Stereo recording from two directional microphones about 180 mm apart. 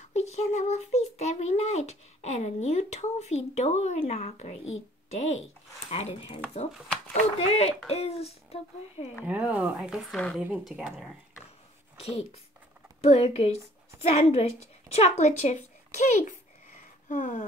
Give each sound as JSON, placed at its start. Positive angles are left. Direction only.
{"t": 0.1, "sound": "a child's voice", "side_deg": 35}
{"t": 9.2, "sound": "speech", "side_deg": -10}
{"t": 12.0, "sound": "a child's voice", "side_deg": 35}
{"t": 14.9, "sound": "a child's voice", "side_deg": 35}